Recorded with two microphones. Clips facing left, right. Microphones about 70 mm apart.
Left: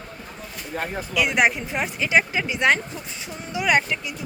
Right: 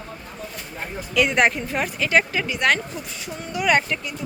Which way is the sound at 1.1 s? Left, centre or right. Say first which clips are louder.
Right 2 dB; centre.